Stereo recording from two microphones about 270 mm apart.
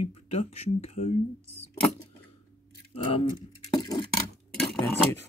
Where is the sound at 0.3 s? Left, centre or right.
Left.